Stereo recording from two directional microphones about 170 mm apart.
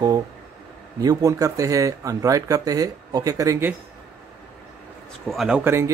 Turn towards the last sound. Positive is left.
turn(degrees=-5)  # may be behind; listen again after turning